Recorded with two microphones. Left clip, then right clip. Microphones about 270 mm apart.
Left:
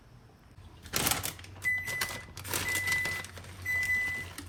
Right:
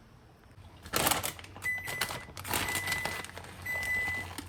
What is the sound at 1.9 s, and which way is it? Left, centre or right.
Cash register, right.